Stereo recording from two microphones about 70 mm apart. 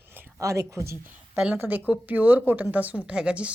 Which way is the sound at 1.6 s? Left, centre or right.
Right.